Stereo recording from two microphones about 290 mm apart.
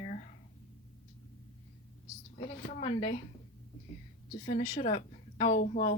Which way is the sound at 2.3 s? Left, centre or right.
Left.